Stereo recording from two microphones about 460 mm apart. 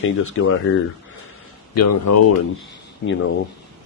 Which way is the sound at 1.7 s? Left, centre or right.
Left.